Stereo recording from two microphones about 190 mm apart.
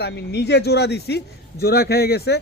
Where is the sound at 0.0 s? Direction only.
60° left (ahead or behind).